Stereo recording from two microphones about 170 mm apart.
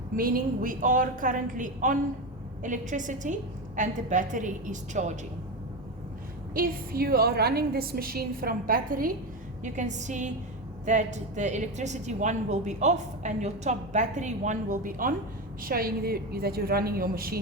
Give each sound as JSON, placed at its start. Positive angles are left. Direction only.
{"t": 0.2, "sound": "a woman's voice", "side_deg": -55}
{"t": 6.5, "sound": "a woman's voice", "side_deg": -60}
{"t": 9.7, "sound": "a woman's voice", "side_deg": -45}